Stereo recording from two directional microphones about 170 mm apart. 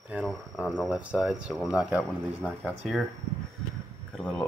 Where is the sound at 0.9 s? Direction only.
5° right (ahead or behind).